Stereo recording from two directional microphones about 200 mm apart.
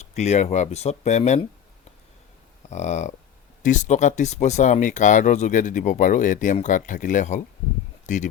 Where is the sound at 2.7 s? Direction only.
35° left (ahead or behind).